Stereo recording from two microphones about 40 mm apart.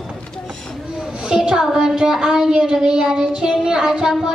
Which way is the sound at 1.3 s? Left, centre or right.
Centre.